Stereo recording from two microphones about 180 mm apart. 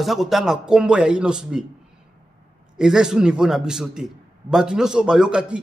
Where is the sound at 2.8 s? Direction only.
5° right (ahead or behind).